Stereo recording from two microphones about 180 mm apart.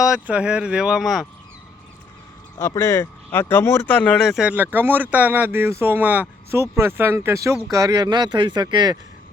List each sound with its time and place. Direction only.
0.0 s speech: 5° right (ahead or behind)
2.6 s speech: 15° left (ahead or behind); by 9.0 s 25° right (ahead or behind)